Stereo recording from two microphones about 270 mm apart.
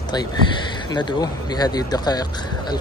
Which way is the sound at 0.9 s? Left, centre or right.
Centre.